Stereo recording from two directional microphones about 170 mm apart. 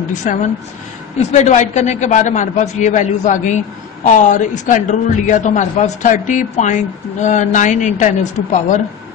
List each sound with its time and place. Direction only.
0.1 s a man's voice: 45° left (ahead or behind)